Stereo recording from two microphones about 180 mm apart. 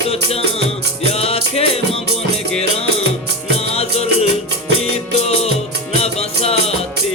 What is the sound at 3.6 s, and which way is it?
Music, 35° left (ahead or behind).